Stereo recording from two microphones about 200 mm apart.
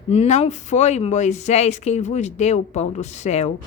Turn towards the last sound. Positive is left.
turn(degrees=35)  # may be behind; listen again after turning